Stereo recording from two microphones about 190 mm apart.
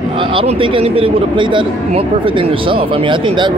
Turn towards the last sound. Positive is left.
turn(degrees=-25)  # may be behind; listen again after turning